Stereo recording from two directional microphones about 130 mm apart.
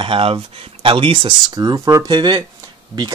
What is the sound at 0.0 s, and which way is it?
Speech, 45° right (ahead or behind).